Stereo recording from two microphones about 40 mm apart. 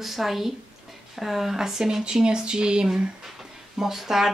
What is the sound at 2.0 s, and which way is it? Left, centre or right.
Speech, centre.